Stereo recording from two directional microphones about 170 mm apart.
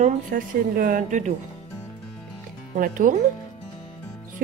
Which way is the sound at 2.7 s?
50° right (ahead or behind).